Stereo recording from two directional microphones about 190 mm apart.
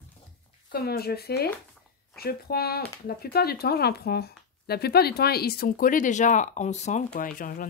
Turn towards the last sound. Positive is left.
turn(degrees=45)  # may be behind; listen again after turning